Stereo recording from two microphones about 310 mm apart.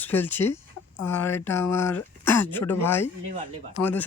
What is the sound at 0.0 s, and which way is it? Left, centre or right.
Speech, centre.